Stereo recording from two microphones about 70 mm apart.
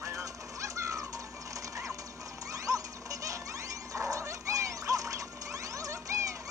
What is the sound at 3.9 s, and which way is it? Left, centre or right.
Dog, right.